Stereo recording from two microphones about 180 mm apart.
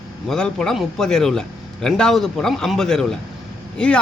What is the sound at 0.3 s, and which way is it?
Speech, 5° left (ahead or behind).